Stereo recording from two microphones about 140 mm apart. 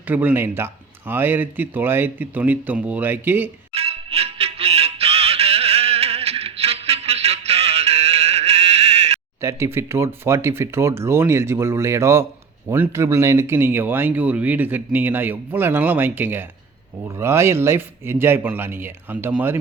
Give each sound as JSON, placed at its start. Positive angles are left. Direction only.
{"t": 0.1, "sound": "speech", "side_deg": -15}
{"t": 3.8, "sound": "music", "side_deg": -45}
{"t": 9.4, "sound": "speech", "side_deg": -20}